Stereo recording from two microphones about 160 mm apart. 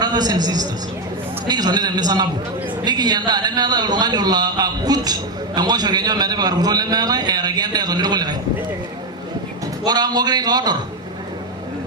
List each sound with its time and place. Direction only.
0.0 s a man's voice: 25° right (ahead or behind)
9.8 s a man's voice: 25° right (ahead or behind)